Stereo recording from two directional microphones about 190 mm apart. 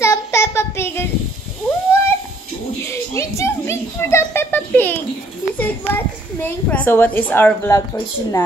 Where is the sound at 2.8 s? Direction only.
15° left (ahead or behind).